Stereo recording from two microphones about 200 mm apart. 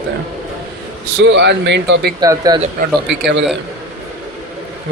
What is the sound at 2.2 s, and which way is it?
Speech, 20° right (ahead or behind).